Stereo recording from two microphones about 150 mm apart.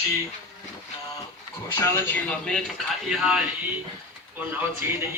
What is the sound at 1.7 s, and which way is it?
Speech, 20° left (ahead or behind).